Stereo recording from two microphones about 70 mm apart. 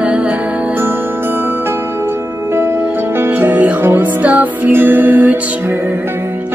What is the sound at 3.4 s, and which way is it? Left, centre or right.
Music, right.